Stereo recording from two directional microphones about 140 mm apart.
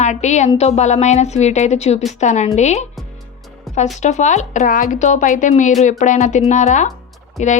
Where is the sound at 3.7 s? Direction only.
Centre (ahead or behind).